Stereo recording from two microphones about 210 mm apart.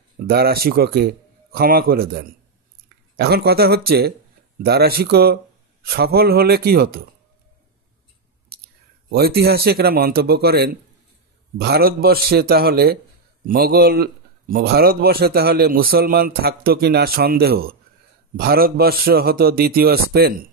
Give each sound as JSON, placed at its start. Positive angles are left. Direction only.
{"t": 0.3, "sound": "a man's voice", "side_deg": -50}
{"t": 9.1, "sound": "a man's voice", "side_deg": -50}